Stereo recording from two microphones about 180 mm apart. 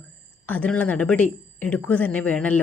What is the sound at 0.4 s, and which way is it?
A woman's voice, 10° left (ahead or behind).